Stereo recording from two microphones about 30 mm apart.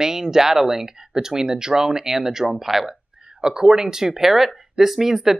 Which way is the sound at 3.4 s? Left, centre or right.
Right.